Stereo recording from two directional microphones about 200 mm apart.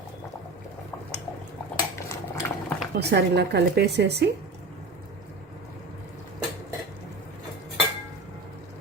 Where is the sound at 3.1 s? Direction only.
55° right (ahead or behind).